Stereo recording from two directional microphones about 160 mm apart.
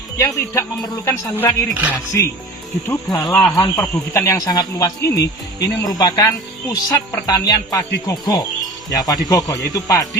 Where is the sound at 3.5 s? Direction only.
20° left (ahead or behind).